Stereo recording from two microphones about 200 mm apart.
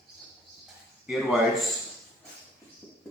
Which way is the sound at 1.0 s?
Centre (ahead or behind).